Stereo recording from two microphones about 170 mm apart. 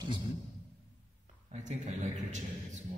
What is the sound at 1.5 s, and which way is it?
A man's voice, 45° right (ahead or behind).